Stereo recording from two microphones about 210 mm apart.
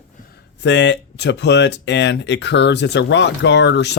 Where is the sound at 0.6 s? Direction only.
55° left (ahead or behind).